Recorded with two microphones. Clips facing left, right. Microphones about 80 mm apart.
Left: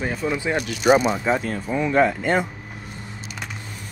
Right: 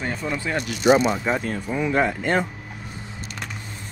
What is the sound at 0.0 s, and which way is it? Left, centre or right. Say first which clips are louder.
Speech: left 3 dB; centre.